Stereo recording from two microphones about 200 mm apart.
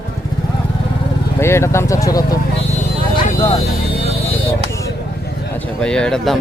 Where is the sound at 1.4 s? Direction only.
15° left (ahead or behind).